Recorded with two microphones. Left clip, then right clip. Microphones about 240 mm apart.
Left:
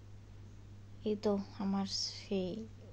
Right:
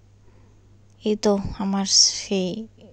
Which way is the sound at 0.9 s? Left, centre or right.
Right.